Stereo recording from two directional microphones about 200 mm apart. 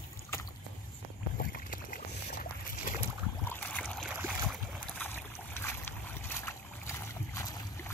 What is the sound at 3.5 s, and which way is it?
Boat, 5° left (ahead or behind).